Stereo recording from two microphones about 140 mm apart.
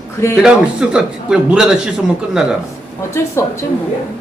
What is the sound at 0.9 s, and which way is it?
Speech, 5° right (ahead or behind).